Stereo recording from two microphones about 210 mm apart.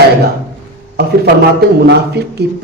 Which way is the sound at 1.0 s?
50° right (ahead or behind).